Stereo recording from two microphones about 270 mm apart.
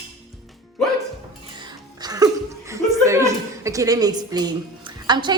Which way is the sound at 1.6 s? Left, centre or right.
Centre.